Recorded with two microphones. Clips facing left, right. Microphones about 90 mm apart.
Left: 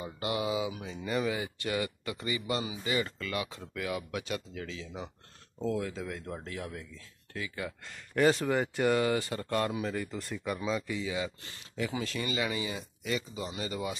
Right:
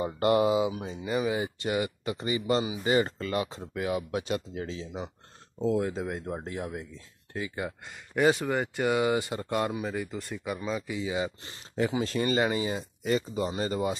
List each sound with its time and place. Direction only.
0.0 s speech: 45° right (ahead or behind)
1.0 s speech: 15° right (ahead or behind)
7.8 s speech: 15° right (ahead or behind)
9.0 s speech: 15° right (ahead or behind)
9.7 s speech: 5° right (ahead or behind)
11.1 s speech: 25° right (ahead or behind)